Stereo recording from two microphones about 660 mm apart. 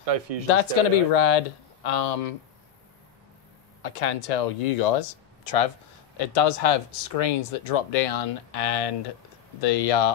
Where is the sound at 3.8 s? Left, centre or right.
Left.